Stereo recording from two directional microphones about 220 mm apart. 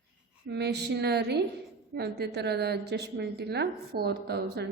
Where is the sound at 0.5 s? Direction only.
50° right (ahead or behind).